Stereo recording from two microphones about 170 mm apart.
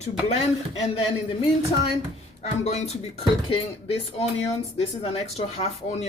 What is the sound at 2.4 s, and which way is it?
Speech, 40° left (ahead or behind).